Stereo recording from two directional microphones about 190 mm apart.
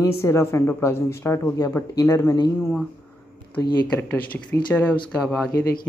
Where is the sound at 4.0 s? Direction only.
10° left (ahead or behind).